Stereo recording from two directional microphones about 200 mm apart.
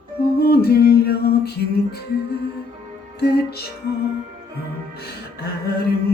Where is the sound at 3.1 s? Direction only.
55° left (ahead or behind).